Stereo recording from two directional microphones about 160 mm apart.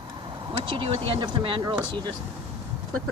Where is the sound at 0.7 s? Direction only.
30° right (ahead or behind).